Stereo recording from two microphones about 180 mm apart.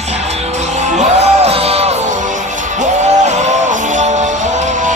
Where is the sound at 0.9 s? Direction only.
35° right (ahead or behind).